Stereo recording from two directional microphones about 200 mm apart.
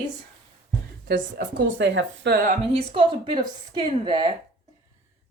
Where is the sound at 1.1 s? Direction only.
65° right (ahead or behind).